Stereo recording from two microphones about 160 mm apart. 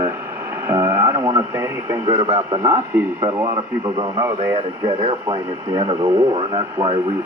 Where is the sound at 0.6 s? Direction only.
20° right (ahead or behind).